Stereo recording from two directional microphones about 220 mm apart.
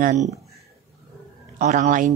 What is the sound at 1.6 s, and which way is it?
Speech, 35° right (ahead or behind).